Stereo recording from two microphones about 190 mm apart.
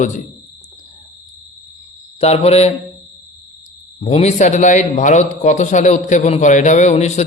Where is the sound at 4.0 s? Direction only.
35° left (ahead or behind).